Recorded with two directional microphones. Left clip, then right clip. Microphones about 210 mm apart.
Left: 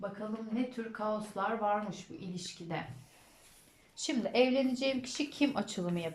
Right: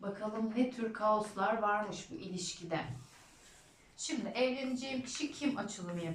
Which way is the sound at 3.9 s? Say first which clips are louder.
Left 7 dB; 45° left (ahead or behind).